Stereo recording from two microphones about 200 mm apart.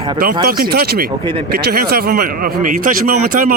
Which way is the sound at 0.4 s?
50° right (ahead or behind).